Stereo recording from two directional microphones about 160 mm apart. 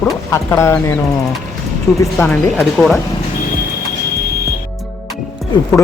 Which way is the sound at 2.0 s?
10° left (ahead or behind).